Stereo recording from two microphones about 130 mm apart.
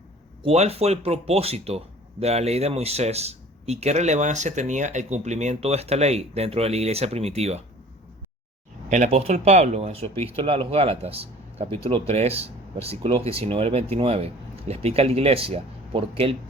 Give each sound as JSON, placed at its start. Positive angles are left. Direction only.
{"t": 0.4, "sound": "speech", "side_deg": -50}
{"t": 8.9, "sound": "speech", "side_deg": -65}
{"t": 10.3, "sound": "speech", "side_deg": -45}